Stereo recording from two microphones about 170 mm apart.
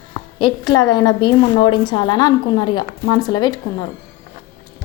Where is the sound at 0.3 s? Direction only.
25° left (ahead or behind).